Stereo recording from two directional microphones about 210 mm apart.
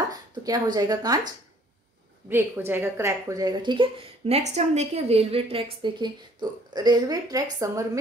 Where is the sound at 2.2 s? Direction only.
10° right (ahead or behind).